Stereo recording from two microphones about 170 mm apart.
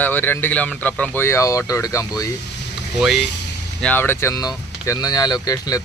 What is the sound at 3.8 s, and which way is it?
Speech, 10° left (ahead or behind).